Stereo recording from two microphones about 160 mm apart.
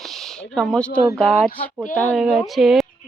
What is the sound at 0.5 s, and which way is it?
Speech, 5° left (ahead or behind).